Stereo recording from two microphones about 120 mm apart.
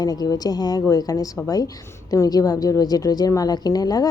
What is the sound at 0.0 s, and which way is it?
A woman's voice, 30° left (ahead or behind).